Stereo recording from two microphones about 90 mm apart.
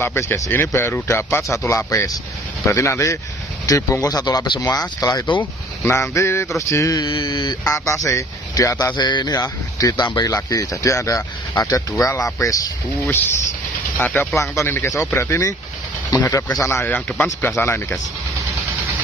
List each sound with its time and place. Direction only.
0.0 s speech: 25° left (ahead or behind); by 5.2 s 45° left (ahead or behind)
5.4 s speech: 30° left (ahead or behind)
7.0 s speech: 55° left (ahead or behind)
7.6 s speech: 35° left (ahead or behind)
8.9 s a sound: 55° left (ahead or behind)
9.3 s speech: 40° left (ahead or behind)
13.9 s speech: 20° left (ahead or behind)
14.4 s speech: 35° left (ahead or behind)
16.9 s speech: 15° left (ahead or behind)
17.6 s speech: 25° left (ahead or behind)